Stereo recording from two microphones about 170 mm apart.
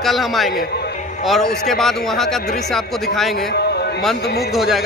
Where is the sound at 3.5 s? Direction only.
70° left (ahead or behind).